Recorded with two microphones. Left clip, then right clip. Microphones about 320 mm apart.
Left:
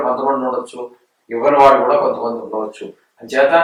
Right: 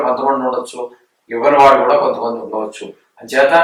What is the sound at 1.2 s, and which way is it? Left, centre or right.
Speech, centre.